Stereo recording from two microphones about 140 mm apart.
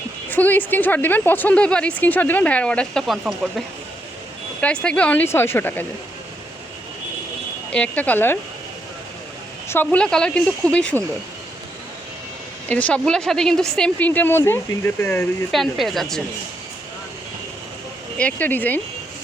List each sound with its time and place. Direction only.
0.3 s speech: 15° left (ahead or behind)
4.6 s speech: 5° left (ahead or behind)
7.7 s speech: 10° left (ahead or behind)
9.6 s speech: 15° left (ahead or behind)
12.6 s speech: 10° left (ahead or behind)
15.5 s speech: centre (ahead or behind)
18.2 s speech: 10° left (ahead or behind)